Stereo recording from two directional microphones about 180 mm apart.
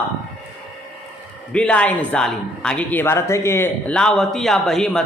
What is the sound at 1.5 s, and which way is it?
Speech, 5° left (ahead or behind).